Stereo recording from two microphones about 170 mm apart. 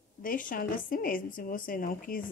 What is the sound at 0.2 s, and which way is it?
A woman's voice, 55° left (ahead or behind).